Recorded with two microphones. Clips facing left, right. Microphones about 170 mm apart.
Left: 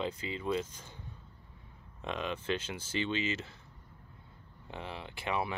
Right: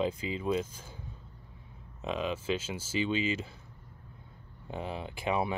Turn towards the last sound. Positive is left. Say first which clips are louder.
# right 4 dB
turn(degrees=-20)  # may be behind; listen again after turning